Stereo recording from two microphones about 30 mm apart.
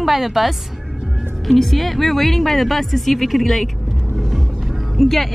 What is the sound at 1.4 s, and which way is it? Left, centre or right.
Speech, centre.